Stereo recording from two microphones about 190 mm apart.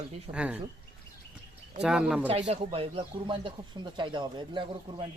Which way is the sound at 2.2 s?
30° right (ahead or behind).